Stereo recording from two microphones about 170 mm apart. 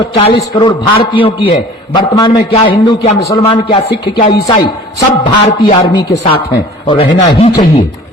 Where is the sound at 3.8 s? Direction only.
80° left.